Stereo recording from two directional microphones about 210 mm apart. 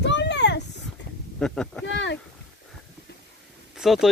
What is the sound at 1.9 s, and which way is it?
Speech, 60° left (ahead or behind).